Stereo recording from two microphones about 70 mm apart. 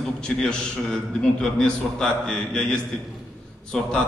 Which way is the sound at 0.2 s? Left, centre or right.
Centre.